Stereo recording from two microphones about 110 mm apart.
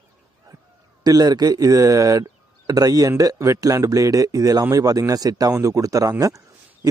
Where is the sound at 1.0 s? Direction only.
35° right (ahead or behind).